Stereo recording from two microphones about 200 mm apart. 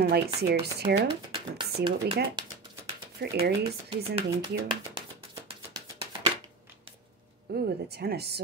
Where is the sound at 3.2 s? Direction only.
55° right (ahead or behind).